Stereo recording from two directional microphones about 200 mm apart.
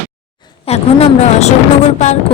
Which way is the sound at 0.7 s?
30° left (ahead or behind).